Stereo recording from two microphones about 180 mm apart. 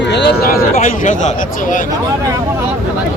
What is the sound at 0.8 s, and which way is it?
Speech, 45° left (ahead or behind).